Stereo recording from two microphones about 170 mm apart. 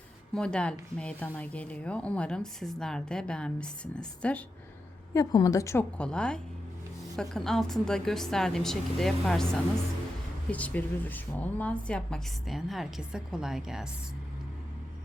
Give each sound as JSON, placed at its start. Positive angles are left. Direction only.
{"t": 0.3, "sound": "a woman's voice", "side_deg": 5}
{"t": 5.1, "sound": "a woman's voice", "side_deg": 20}
{"t": 6.0, "sound": "a woman's voice", "side_deg": 5}